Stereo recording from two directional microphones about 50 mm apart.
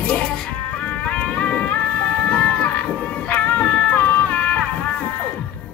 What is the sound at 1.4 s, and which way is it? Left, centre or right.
Music, left.